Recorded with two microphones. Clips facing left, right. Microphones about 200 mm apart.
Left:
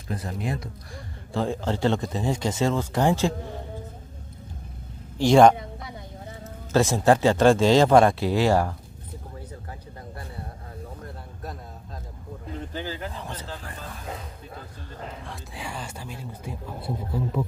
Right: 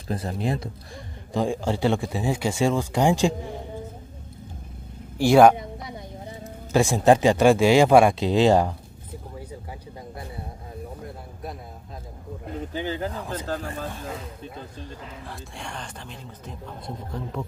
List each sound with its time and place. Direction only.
0.1 s speech: 30° right (ahead or behind)
1.3 s speech: 15° right (ahead or behind)
5.1 s speech: 10° right (ahead or behind)
5.6 s speech: 20° right (ahead or behind)
12.7 s speech: 20° right (ahead or behind)
13.2 s speech: 10° right (ahead or behind)
13.7 s speech: 25° right (ahead or behind)
15.2 s speech: 5° left (ahead or behind)